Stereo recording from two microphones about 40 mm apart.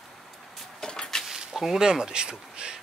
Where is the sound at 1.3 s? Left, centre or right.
Centre.